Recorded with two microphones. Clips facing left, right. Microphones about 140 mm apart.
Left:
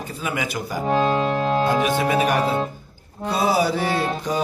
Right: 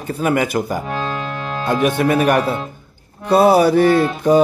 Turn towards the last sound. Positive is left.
turn(degrees=-55)  # may be behind; listen again after turning